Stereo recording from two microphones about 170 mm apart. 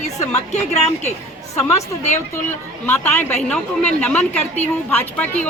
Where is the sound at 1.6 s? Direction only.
15° left (ahead or behind).